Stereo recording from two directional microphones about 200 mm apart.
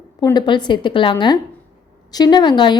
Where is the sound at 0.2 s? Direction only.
20° left (ahead or behind).